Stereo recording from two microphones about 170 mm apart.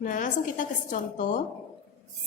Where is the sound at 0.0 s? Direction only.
50° left (ahead or behind).